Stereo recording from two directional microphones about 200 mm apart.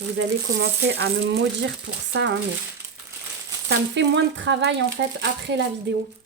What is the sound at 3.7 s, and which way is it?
Speech, 65° right (ahead or behind).